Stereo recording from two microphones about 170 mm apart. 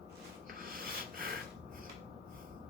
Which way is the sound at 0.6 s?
60° right (ahead or behind).